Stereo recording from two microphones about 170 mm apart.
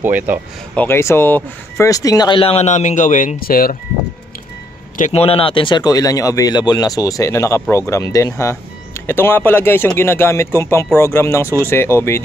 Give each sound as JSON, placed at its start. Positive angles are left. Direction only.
{"t": 0.0, "sound": "speech", "side_deg": -10}
{"t": 0.7, "sound": "speech", "side_deg": 15}
{"t": 4.9, "sound": "speech", "side_deg": 40}